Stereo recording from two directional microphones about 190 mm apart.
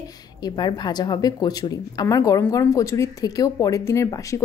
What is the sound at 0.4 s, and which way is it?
Speech, 25° left (ahead or behind).